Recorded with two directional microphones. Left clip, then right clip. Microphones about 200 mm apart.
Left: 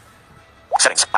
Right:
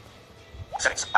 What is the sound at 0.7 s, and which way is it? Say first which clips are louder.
Speech: left 10 dB; 50° left (ahead or behind).